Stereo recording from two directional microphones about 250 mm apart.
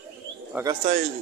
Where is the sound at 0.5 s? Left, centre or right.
Centre.